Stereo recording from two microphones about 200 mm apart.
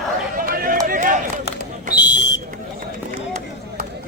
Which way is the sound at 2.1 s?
65° left (ahead or behind).